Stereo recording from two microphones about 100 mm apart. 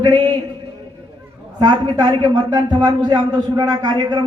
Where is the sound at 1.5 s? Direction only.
45° right (ahead or behind).